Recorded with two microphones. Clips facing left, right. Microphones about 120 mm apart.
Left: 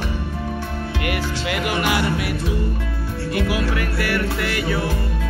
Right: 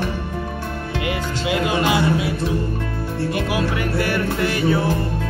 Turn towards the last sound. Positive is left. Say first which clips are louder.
# right 4 dB
turn(degrees=-25)  # may be behind; listen again after turning